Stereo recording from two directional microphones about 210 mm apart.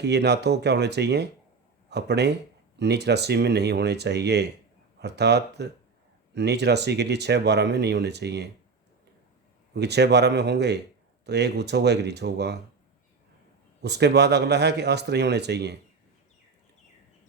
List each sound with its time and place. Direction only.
0.0 s speech: 55° right (ahead or behind)
9.7 s speech: 55° right (ahead or behind)
13.8 s speech: 50° right (ahead or behind)